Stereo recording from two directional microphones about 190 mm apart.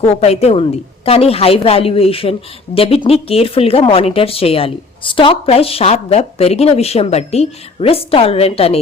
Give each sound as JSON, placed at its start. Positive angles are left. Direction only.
{"t": 0.0, "sound": "speech", "side_deg": 35}